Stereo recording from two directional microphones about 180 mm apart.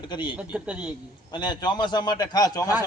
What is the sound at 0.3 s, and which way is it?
Speech, 5° right (ahead or behind).